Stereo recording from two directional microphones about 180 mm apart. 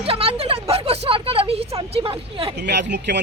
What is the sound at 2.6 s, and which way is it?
Speech, 70° right (ahead or behind).